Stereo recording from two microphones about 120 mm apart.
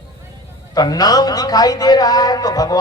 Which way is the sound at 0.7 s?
30° left (ahead or behind).